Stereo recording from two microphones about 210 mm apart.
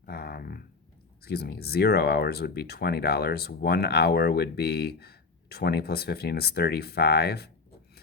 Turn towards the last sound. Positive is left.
turn(degrees=50)  # may be behind; listen again after turning